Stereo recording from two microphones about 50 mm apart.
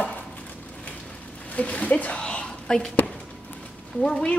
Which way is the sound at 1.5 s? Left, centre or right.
Left.